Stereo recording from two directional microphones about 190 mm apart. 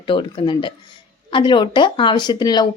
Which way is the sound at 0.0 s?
25° left (ahead or behind).